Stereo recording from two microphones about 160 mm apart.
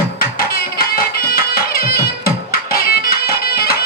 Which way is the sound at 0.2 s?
65° left (ahead or behind).